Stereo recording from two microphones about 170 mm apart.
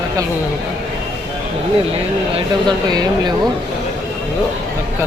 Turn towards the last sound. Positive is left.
turn(degrees=-25)  # may be behind; listen again after turning